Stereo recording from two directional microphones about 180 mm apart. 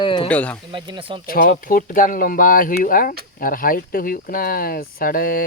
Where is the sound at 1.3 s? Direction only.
55° left (ahead or behind).